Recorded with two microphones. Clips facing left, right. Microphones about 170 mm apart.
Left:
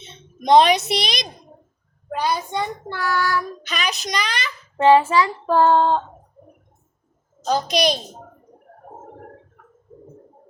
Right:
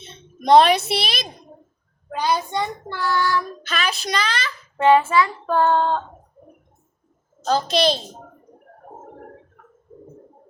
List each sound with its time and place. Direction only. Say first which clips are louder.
0.4 s child singing: even; 15° left (ahead or behind)
1.1 s a child's voice: left 1 dB; 15° left (ahead or behind)
2.6 s child singing: even; 5° left (ahead or behind)
4.8 s child singing: left 1 dB; 30° left (ahead or behind)
7.4 s child singing: right 1 dB; 15° left (ahead or behind)